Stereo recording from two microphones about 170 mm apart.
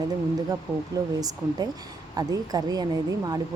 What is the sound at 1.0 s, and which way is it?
Speech, 20° right (ahead or behind).